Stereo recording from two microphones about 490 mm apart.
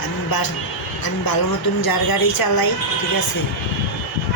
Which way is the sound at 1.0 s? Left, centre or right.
Left.